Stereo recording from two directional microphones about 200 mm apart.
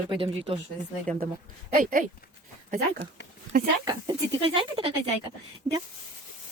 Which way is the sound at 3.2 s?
60° left (ahead or behind).